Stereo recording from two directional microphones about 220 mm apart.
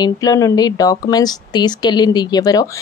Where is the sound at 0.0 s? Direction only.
15° left (ahead or behind).